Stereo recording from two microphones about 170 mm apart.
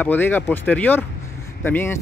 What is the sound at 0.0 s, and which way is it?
Speech, 10° left (ahead or behind).